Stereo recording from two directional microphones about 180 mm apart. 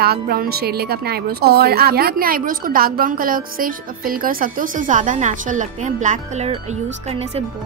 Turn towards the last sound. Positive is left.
turn(degrees=-40)  # may be behind; listen again after turning